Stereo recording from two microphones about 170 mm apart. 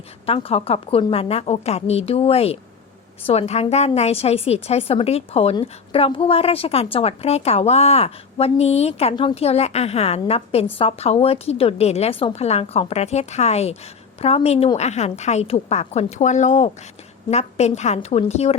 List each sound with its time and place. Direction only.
0.3 s a woman's voice: 35° left (ahead or behind)